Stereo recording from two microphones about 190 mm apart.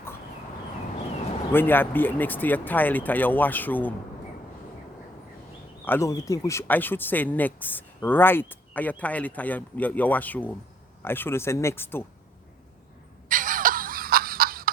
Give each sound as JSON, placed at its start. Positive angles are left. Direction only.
{"t": 1.5, "sound": "speech", "side_deg": 10}
{"t": 5.8, "sound": "speech", "side_deg": 15}
{"t": 13.2, "sound": "a sound", "side_deg": -45}